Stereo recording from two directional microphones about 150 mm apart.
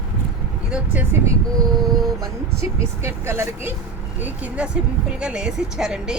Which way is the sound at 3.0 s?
15° right (ahead or behind).